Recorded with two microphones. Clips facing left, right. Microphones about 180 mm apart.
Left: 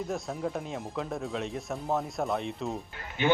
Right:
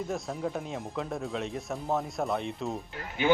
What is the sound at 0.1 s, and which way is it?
A man's voice, centre (ahead or behind).